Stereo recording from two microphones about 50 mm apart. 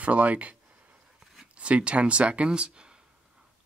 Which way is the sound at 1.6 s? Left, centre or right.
Right.